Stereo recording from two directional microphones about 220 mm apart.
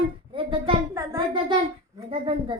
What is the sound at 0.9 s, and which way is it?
Speech, 15° right (ahead or behind).